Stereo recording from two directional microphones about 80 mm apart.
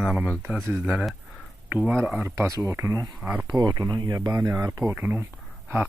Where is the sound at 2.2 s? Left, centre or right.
Right.